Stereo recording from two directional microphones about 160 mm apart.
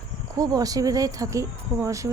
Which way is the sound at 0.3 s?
20° right (ahead or behind).